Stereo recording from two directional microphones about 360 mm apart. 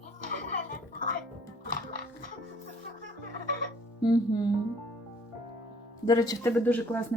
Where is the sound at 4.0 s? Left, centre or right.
Centre.